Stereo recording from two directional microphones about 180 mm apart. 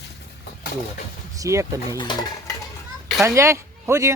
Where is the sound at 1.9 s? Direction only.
25° left (ahead or behind).